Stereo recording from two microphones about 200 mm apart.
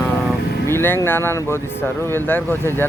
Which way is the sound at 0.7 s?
10° left (ahead or behind).